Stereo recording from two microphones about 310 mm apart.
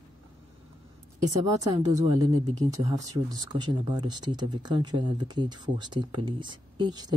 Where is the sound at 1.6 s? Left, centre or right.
Centre.